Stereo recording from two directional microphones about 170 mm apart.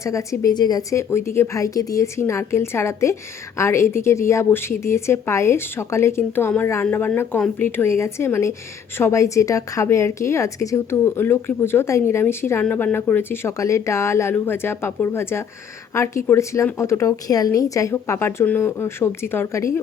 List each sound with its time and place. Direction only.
0.0 s a woman's voice: 20° left (ahead or behind)